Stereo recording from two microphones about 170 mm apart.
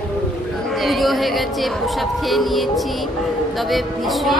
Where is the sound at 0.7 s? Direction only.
Centre (ahead or behind).